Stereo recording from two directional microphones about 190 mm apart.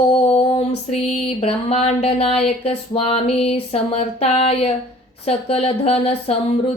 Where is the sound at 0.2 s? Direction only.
30° left (ahead or behind).